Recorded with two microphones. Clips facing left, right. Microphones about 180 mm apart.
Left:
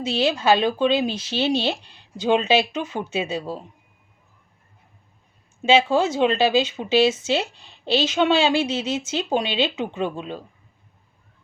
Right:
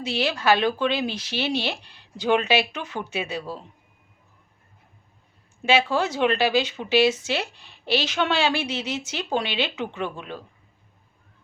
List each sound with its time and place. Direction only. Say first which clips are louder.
0.0 s speech: left 3 dB; 20° left (ahead or behind)
5.6 s speech: left 4 dB; 20° left (ahead or behind)